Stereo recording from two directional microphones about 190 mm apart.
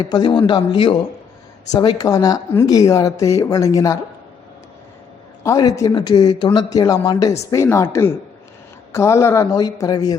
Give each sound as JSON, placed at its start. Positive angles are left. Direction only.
{"t": 0.0, "sound": "speech", "side_deg": 25}
{"t": 5.4, "sound": "speech", "side_deg": 15}